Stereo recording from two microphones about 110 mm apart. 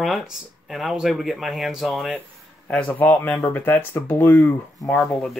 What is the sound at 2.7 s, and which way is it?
Speech, 10° left (ahead or behind).